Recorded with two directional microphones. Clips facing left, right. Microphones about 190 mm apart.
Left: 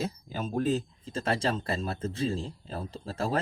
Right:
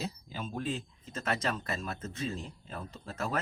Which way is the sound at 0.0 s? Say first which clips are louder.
Left 5 dB; 45° left (ahead or behind).